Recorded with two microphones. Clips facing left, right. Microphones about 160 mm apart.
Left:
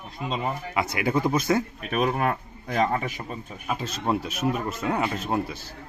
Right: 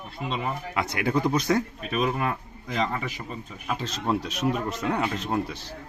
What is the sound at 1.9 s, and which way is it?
Speech, 50° left (ahead or behind).